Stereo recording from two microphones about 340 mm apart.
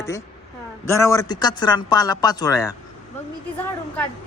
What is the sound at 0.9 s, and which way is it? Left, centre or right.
Speech, centre.